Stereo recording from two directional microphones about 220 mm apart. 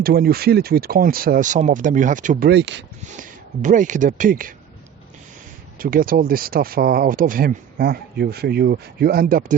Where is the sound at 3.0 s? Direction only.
35° right (ahead or behind).